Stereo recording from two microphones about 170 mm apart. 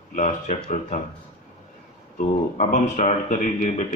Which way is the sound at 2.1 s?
45° left (ahead or behind).